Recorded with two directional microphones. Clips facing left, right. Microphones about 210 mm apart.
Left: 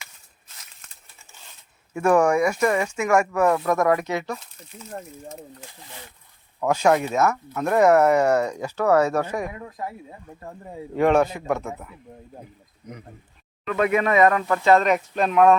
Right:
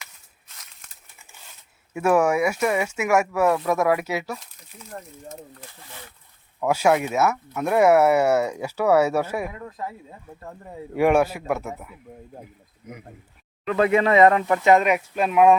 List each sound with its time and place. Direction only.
1.9 s speech: 5° right (ahead or behind)
6.6 s speech: 10° right (ahead or behind)
9.5 s speech: 15° left (ahead or behind)
10.9 s speech: 10° right (ahead or behind)
13.7 s speech: 30° right (ahead or behind); by 15.5 s 10° right (ahead or behind)